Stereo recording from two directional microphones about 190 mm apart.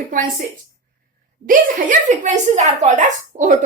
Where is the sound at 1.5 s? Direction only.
40° right (ahead or behind).